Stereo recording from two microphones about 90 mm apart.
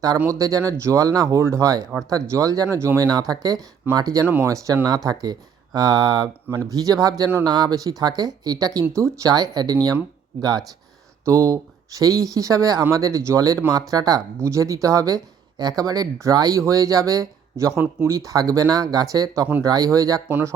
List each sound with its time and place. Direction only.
0.3 s speech: 40° right (ahead or behind)
3.0 s speech: 45° right (ahead or behind)
8.9 s speech: 35° right (ahead or behind)
9.3 s speech: 50° right (ahead or behind)
11.3 s speech: 35° right (ahead or behind)
14.3 s speech: 35° right (ahead or behind)
20.2 s speech: 25° right (ahead or behind)